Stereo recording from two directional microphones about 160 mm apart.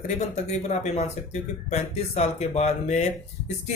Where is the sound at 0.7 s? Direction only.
45° left (ahead or behind).